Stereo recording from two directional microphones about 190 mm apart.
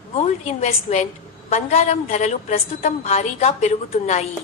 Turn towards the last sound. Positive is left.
turn(degrees=35)  # may be behind; listen again after turning